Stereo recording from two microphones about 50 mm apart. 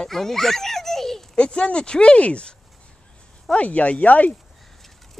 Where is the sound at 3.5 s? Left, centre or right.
Left.